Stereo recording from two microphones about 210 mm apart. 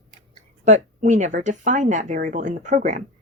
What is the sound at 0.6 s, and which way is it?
Speech, 35° right (ahead or behind).